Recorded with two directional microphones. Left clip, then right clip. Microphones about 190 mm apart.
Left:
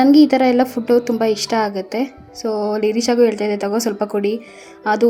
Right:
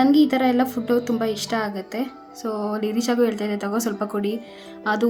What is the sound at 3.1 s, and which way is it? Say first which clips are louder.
A woman's voice: left 6 dB; 10° left (ahead or behind).